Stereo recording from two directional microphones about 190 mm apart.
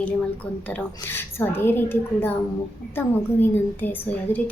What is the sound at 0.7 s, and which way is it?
A woman's voice, 10° left (ahead or behind).